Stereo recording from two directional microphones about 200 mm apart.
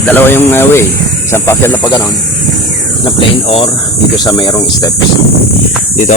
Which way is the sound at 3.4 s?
30° left (ahead or behind).